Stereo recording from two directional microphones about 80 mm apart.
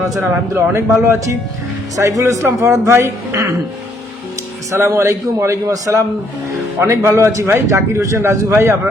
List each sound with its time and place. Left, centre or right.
0.2 s a man's voice: right
4.7 s a man's voice: right
6.8 s a man's voice: right